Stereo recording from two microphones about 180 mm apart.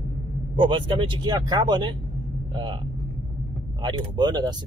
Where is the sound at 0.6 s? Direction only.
25° right (ahead or behind).